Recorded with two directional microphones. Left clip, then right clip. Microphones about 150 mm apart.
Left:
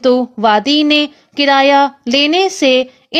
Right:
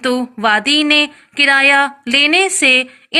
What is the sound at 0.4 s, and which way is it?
Speech, 60° left (ahead or behind).